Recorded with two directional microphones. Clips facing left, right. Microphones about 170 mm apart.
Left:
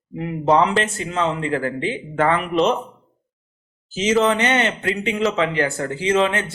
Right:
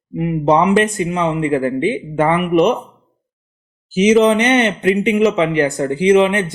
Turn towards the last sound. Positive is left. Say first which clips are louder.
# right 7 dB
turn(degrees=-15)  # may be behind; listen again after turning